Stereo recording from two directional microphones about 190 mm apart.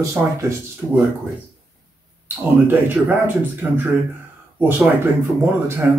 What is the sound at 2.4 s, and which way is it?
Speech, 10° right (ahead or behind).